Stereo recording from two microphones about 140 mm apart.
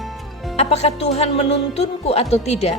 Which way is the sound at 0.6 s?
50° left (ahead or behind).